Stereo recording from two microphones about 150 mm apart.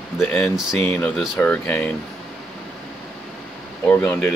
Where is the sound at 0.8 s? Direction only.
10° left (ahead or behind).